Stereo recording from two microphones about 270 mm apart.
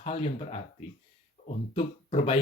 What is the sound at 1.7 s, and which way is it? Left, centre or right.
Speech, left.